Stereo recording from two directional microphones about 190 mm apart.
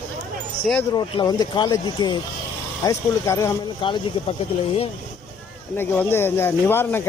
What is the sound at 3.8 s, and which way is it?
Speech, 25° left (ahead or behind).